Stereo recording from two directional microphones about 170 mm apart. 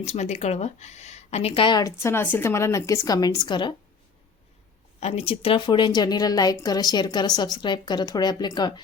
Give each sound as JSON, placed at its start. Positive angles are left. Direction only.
{"t": 0.0, "sound": "a woman's voice", "side_deg": 40}
{"t": 4.9, "sound": "a woman's voice", "side_deg": 40}